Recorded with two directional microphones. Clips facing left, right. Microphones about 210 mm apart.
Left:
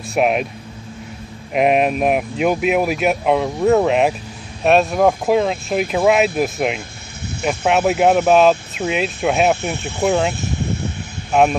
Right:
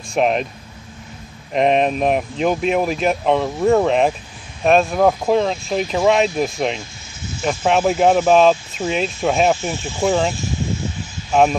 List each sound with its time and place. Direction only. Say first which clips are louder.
0.1 s speech: left 1 dB; 5° left (ahead or behind)
1.5 s speech: left 1 dB; 5° left (ahead or behind)
9.6 s speech: left 1 dB; 60° left (ahead or behind)
10.3 s a sound: left 1 dB; 60° left (ahead or behind)